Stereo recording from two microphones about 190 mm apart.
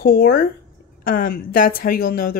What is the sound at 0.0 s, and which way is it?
Speech, 50° left (ahead or behind).